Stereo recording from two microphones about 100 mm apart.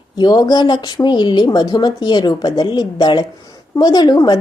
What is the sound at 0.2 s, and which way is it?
A woman's voice, 45° left (ahead or behind).